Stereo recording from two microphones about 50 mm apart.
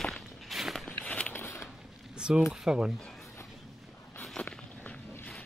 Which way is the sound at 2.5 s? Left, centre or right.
Centre.